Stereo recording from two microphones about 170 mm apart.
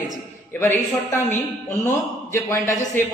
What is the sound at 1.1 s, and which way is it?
Speech, 15° left (ahead or behind).